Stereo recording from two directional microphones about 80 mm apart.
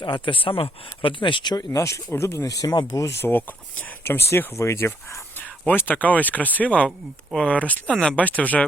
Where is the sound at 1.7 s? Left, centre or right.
Left.